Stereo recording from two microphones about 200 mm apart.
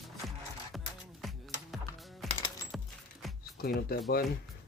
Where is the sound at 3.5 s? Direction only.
50° left (ahead or behind).